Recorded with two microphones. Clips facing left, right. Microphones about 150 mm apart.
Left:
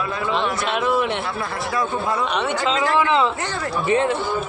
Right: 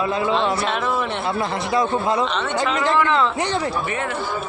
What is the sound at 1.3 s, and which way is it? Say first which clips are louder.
Speech: right 4 dB; 20° right (ahead or behind).